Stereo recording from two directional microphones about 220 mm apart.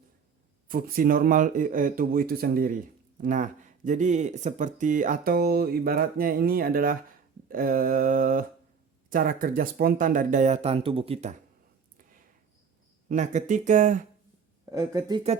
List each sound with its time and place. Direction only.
0.7 s speech: 40° right (ahead or behind)
13.1 s speech: 35° right (ahead or behind)
14.6 s speech: 15° right (ahead or behind)